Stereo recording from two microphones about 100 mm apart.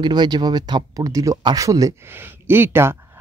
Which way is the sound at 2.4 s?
20° right (ahead or behind).